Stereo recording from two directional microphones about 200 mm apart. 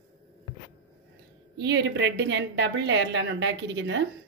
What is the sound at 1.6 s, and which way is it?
A woman's voice, 60° right (ahead or behind).